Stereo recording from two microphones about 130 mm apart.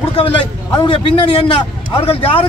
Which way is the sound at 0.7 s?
40° left (ahead or behind).